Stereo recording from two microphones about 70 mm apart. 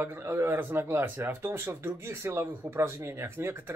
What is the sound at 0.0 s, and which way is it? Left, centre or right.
Speech, right.